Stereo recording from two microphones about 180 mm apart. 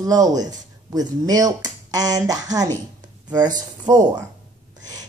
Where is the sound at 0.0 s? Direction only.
20° right (ahead or behind).